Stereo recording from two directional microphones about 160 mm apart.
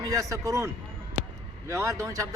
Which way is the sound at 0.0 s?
20° right (ahead or behind).